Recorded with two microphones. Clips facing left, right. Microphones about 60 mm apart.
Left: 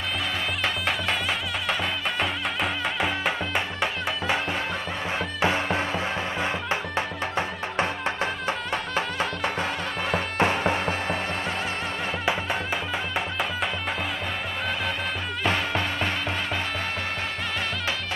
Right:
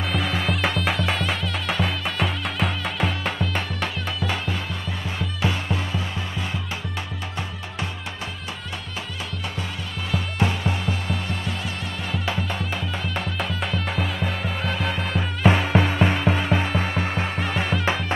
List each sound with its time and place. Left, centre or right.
0.1 s music: centre
4.2 s music: left
8.9 s music: left
13.1 s music: centre
15.4 s music: centre